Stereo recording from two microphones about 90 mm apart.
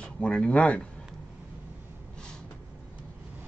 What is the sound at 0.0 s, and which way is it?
Speech, 10° left (ahead or behind).